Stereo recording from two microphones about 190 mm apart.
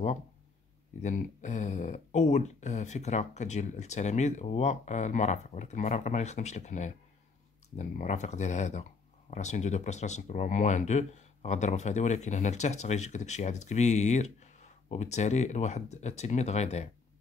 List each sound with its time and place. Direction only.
1.0 s speech: 40° left (ahead or behind)